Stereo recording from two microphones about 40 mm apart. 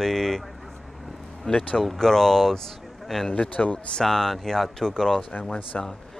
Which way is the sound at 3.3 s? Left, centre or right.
Left.